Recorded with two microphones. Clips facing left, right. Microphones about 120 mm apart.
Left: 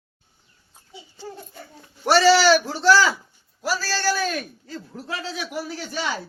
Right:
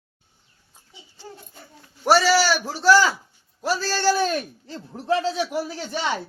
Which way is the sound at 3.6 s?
25° right (ahead or behind).